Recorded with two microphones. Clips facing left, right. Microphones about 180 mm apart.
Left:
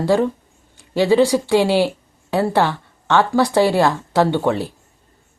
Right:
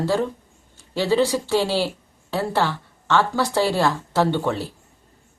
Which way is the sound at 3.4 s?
15° left (ahead or behind).